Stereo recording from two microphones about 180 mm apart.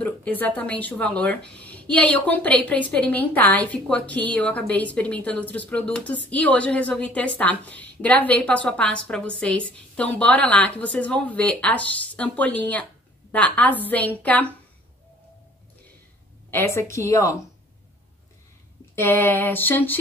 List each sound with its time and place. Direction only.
0.0 s speech: 10° left (ahead or behind)
16.4 s a woman's voice: 15° left (ahead or behind)
18.9 s speech: 10° left (ahead or behind)